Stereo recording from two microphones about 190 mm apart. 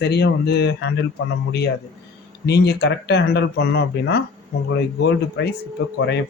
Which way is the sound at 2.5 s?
60° left (ahead or behind).